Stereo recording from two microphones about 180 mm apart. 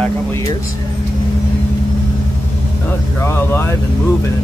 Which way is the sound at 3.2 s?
15° left (ahead or behind).